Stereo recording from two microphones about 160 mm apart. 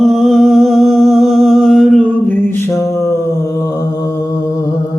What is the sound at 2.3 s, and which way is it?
Mantra, 15° left (ahead or behind).